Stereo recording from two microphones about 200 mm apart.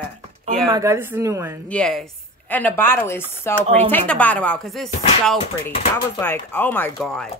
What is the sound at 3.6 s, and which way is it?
Speech, 30° right (ahead or behind).